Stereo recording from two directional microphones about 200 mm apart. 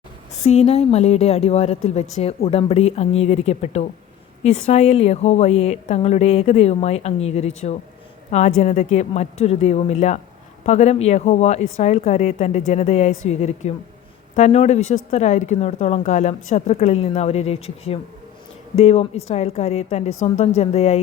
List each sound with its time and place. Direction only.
0.4 s speech: 35° left (ahead or behind)